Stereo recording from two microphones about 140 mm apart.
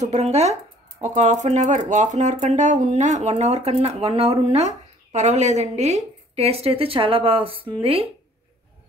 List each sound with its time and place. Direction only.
0.0 s speech: 55° right (ahead or behind)